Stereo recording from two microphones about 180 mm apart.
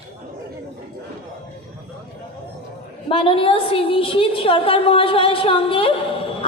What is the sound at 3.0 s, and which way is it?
A woman's voice, 30° left (ahead or behind).